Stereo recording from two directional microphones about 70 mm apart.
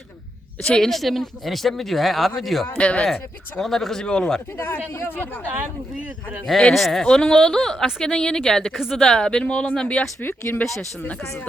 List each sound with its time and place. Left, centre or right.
0.6 s speech: centre
2.7 s speech: centre
3.6 s speech: centre
4.5 s speech: left
6.5 s speech: centre
10.2 s speech: left